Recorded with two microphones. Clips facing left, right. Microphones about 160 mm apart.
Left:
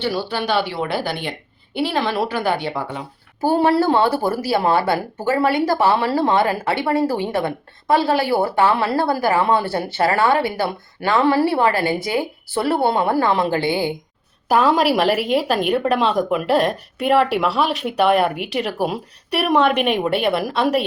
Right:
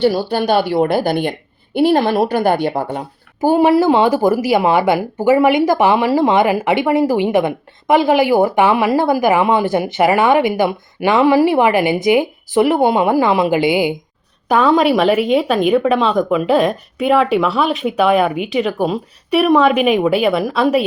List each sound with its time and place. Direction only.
0.0 s a woman's voice: 45° right (ahead or behind)
3.4 s speech: 15° right (ahead or behind)
14.4 s a woman's voice: 5° left (ahead or behind)